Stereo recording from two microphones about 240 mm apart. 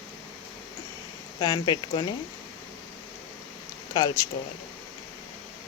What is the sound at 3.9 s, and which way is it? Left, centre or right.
Speech, centre.